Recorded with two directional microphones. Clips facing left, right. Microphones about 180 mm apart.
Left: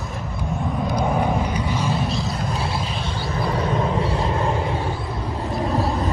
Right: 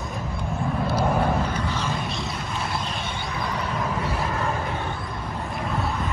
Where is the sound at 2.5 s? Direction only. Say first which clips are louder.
Left 3 dB; 30° left (ahead or behind).